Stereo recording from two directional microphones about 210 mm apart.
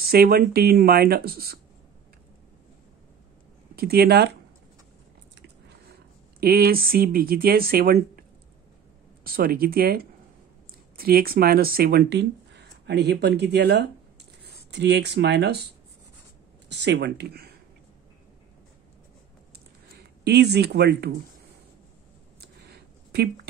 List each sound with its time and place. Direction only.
0.0 s speech: 45° right (ahead or behind)
3.7 s speech: 50° right (ahead or behind)
6.4 s speech: 45° right (ahead or behind)
20.0 s speech: 50° right (ahead or behind)
22.4 s a sound: 50° right (ahead or behind)